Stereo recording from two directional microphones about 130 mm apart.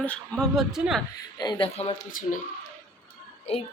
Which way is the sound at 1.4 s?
40° left (ahead or behind).